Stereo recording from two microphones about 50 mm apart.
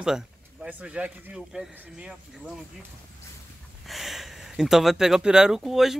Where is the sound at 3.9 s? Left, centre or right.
Centre.